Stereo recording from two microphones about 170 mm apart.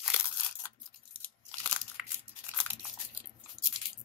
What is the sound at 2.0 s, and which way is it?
Crumpling, 10° right (ahead or behind).